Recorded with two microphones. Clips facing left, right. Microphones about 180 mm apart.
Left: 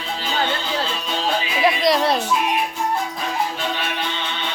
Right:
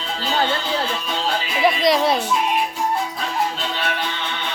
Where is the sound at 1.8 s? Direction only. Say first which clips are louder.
Right 1 dB; centre (ahead or behind).